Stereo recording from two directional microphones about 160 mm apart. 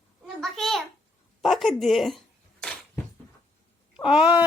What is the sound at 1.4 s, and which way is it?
Speech, centre (ahead or behind).